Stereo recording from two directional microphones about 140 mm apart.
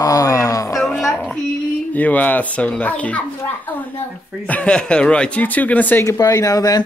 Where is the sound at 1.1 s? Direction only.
Centre (ahead or behind).